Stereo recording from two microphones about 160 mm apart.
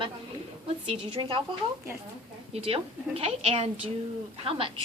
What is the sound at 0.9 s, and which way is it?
Speech, 35° right (ahead or behind).